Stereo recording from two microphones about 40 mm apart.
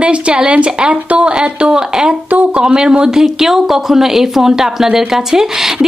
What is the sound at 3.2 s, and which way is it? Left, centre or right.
A woman's voice, centre.